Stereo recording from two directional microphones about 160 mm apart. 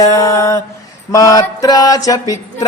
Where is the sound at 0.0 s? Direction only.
20° left (ahead or behind).